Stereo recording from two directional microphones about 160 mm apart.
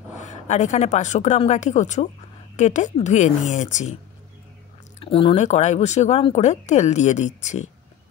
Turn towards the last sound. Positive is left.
turn(degrees=45)  # may be behind; listen again after turning